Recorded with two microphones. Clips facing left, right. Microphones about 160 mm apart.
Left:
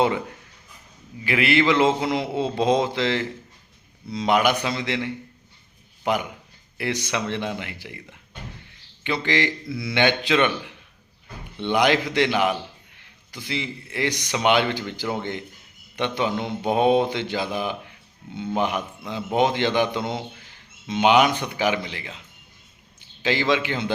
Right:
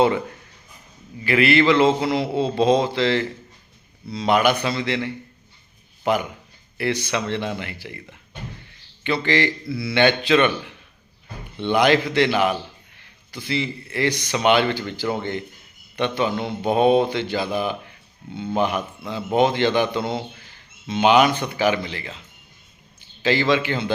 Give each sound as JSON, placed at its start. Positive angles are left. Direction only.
{"t": 1.2, "sound": "speech", "side_deg": 15}
{"t": 9.0, "sound": "speech", "side_deg": 15}
{"t": 11.6, "sound": "a man's voice", "side_deg": 15}